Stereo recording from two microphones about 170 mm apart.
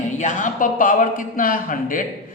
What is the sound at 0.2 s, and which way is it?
Speech, 45° left (ahead or behind).